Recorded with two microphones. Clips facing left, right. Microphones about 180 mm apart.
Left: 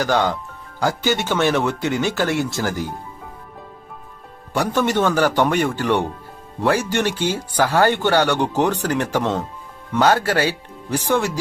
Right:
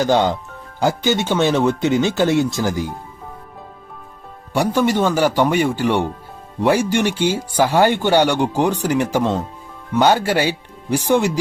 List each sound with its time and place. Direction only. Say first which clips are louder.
0.0 s speech: right 3 dB; 20° right (ahead or behind)
4.5 s speech: right 2 dB; 10° right (ahead or behind)